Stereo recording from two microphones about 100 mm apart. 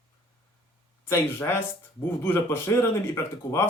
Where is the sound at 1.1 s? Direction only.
25° left (ahead or behind).